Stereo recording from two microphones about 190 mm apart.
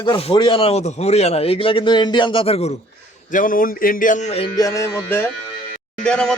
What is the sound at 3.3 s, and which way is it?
Speech, 45° left (ahead or behind).